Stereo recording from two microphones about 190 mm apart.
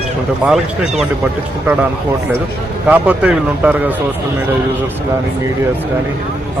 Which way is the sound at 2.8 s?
10° right (ahead or behind).